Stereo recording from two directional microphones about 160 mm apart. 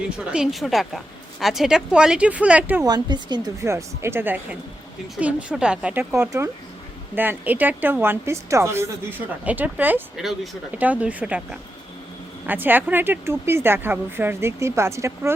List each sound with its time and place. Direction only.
0.2 s a woman's voice: 5° right (ahead or behind)
2.8 s a woman's voice: 25° right (ahead or behind)